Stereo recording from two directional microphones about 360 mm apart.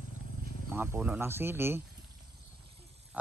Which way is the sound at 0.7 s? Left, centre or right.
Centre.